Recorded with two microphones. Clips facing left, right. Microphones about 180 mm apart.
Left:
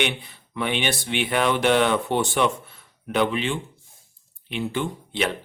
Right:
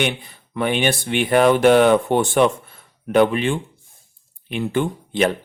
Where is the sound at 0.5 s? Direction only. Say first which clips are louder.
Right 5 dB; 45° right (ahead or behind).